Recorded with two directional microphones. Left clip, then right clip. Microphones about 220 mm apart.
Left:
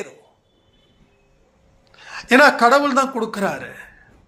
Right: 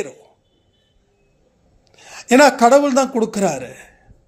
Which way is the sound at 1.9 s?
55° right (ahead or behind).